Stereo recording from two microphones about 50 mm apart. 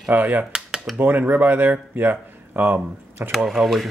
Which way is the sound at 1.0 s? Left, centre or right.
Right.